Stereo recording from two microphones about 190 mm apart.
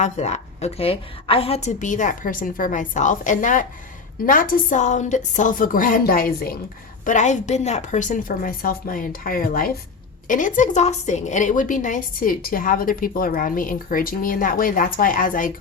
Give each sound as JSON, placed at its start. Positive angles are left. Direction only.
{"t": 0.0, "sound": "a woman's voice", "side_deg": 35}